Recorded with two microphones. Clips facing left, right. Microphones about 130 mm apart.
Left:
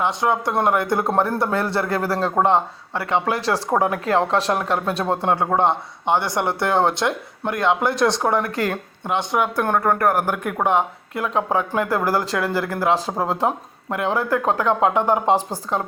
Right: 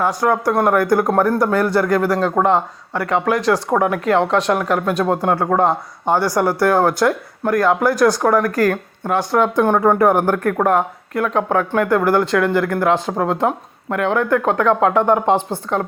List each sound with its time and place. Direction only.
0.0 s speech: 20° left (ahead or behind)
9.7 s speech: 5° right (ahead or behind)
10.1 s speech: 10° left (ahead or behind); by 15.8 s 35° left (ahead or behind)